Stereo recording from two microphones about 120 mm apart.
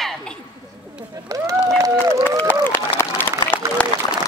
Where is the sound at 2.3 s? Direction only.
15° left (ahead or behind).